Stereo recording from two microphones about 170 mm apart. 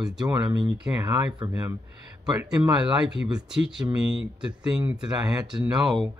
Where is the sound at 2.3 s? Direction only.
5° right (ahead or behind).